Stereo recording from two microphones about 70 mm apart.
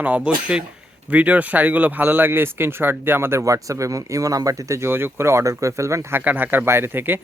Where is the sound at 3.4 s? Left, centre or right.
Right.